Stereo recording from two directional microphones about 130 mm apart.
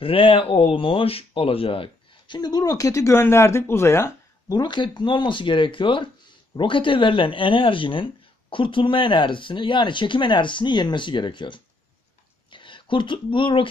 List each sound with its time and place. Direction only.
0.0 s speech: 45° left (ahead or behind); by 4.6 s 20° left (ahead or behind)
4.6 s speech: 35° left (ahead or behind)